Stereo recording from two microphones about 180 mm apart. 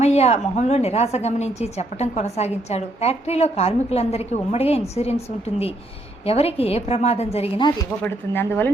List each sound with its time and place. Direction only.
0.0 s a woman's voice: 35° left (ahead or behind)
8.0 s speech: 10° left (ahead or behind)